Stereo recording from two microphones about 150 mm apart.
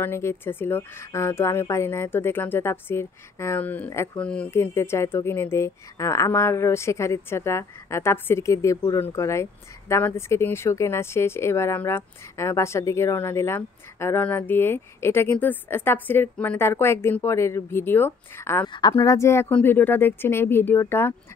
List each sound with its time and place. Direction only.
0.0 s speech: 15° left (ahead or behind)
18.7 s speech: 30° left (ahead or behind)